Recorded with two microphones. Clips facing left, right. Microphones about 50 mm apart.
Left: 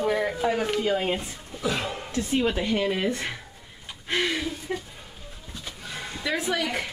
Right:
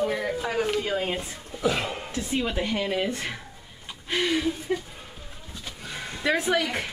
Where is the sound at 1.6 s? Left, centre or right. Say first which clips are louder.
Right 2 dB; centre.